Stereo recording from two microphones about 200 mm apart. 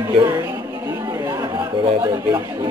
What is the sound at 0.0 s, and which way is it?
Music, 15° right (ahead or behind).